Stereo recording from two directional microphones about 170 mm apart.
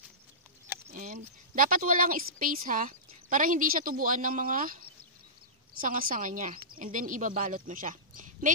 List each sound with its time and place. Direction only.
0.8 s speech: 45° right (ahead or behind)